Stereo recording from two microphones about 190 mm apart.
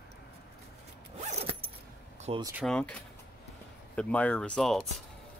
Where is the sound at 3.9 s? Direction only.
5° left (ahead or behind).